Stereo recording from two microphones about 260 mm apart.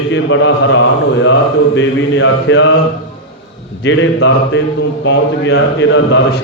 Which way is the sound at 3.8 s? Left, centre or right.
Left.